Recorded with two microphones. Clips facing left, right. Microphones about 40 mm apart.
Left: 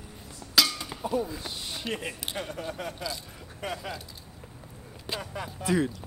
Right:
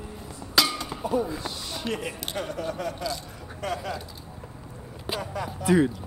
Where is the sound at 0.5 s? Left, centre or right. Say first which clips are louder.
Right 2 dB; centre.